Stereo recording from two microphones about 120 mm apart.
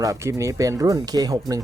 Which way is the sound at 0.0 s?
25° right (ahead or behind).